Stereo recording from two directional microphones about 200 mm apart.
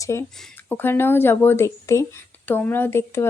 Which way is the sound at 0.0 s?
15° left (ahead or behind).